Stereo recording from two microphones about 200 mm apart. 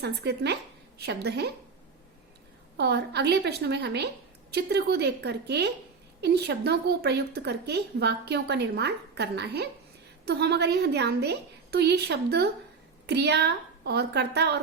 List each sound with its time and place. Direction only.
0.0 s a woman's voice: 55° right (ahead or behind)
2.7 s a woman's voice: 55° right (ahead or behind)